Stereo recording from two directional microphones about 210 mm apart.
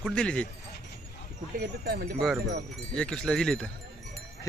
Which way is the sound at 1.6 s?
45° right (ahead or behind).